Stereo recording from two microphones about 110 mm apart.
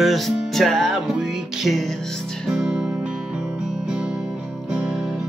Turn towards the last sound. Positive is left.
turn(degrees=0)  # may be behind; listen again after turning